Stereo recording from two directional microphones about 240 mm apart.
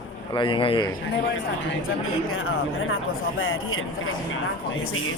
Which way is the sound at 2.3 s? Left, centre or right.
Left.